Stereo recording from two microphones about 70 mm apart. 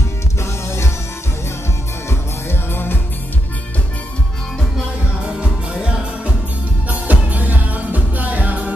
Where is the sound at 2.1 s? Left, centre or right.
Left.